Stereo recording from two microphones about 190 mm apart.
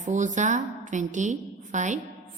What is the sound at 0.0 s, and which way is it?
A woman's voice, 40° right (ahead or behind).